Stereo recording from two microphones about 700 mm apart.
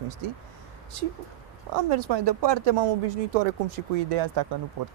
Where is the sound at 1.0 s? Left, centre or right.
Right.